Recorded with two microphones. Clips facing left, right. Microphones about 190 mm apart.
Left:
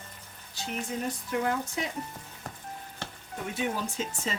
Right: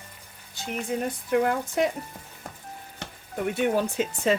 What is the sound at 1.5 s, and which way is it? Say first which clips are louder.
Speech: right 6 dB; 55° right (ahead or behind).